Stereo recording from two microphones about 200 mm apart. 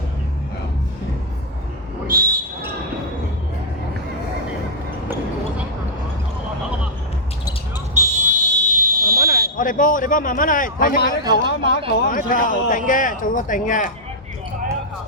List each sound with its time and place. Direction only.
2.0 s a sound: 45° right (ahead or behind)
7.9 s fire alarm: 35° right (ahead or behind)
9.2 s a man's voice: 45° left (ahead or behind)